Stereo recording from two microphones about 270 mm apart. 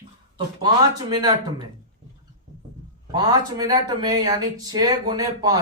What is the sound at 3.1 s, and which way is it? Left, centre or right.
Speech, centre.